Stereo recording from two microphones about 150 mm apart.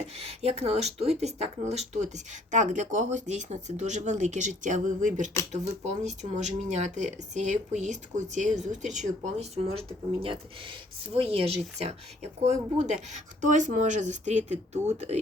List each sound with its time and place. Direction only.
0.2 s speech: 45° right (ahead or behind)